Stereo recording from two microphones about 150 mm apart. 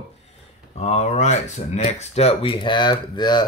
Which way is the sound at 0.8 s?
45° left (ahead or behind).